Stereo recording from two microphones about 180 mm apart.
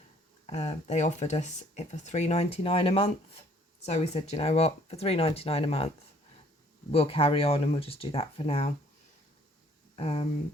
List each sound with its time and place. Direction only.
0.4 s speech: 40° left (ahead or behind)
6.9 s speech: 30° left (ahead or behind)
9.9 s speech: 35° left (ahead or behind)